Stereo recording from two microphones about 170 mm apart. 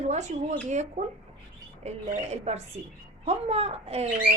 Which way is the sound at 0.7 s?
45° right (ahead or behind).